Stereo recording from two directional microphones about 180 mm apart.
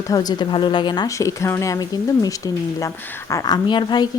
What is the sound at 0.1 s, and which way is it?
A woman's voice, 20° left (ahead or behind).